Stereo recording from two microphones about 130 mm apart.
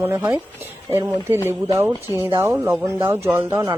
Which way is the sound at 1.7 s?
20° right (ahead or behind).